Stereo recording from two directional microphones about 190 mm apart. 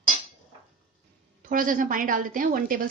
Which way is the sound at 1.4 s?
45° right (ahead or behind).